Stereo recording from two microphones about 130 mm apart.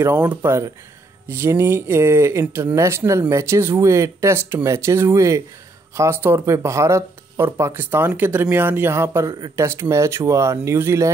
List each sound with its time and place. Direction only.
0.0 s speech: 15° right (ahead or behind)
9.3 s speech: 30° right (ahead or behind)